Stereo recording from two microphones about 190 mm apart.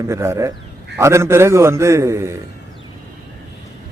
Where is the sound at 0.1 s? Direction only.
15° right (ahead or behind).